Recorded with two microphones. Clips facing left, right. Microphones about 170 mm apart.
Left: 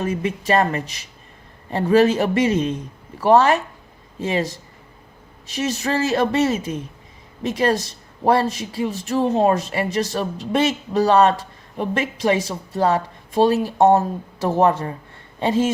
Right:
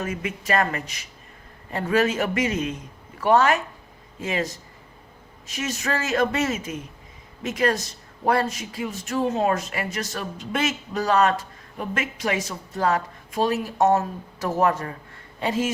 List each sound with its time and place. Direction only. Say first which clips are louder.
0.0 s speech: left 6 dB; 35° left (ahead or behind)